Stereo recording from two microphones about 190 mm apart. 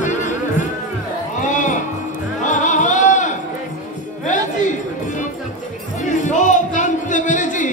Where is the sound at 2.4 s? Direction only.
40° left (ahead or behind).